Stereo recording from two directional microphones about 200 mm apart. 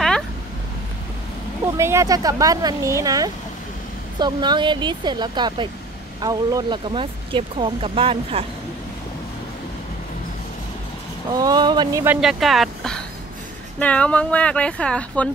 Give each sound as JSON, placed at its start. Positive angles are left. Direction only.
{"t": 1.8, "sound": "speech", "side_deg": -15}
{"t": 11.3, "sound": "speech", "side_deg": -20}
{"t": 12.2, "sound": "speech", "side_deg": 0}